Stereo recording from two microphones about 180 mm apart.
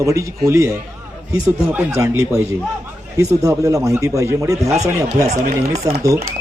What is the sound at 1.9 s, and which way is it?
Speech, 15° right (ahead or behind).